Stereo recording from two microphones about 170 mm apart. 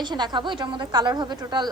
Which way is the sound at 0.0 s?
25° right (ahead or behind).